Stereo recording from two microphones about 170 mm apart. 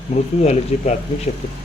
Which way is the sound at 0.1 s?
40° left (ahead or behind).